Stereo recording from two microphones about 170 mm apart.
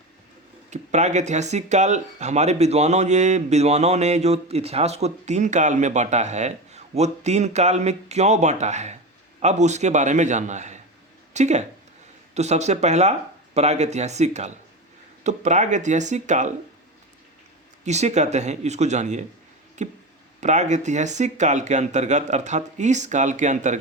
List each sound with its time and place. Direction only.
0.7 s speech: 45° right (ahead or behind)
17.8 s speech: 40° right (ahead or behind)